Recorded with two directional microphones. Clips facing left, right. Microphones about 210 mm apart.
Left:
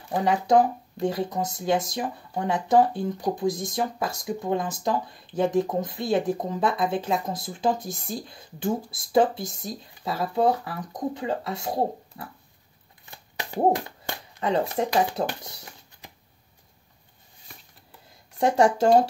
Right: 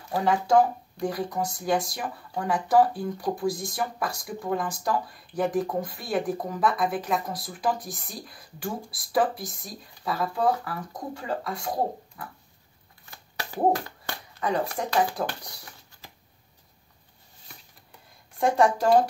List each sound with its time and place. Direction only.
0.1 s speech: 20° left (ahead or behind)
13.1 s a sound: 20° left (ahead or behind)
15.0 s speech: 25° left (ahead or behind)
18.4 s speech: 30° left (ahead or behind)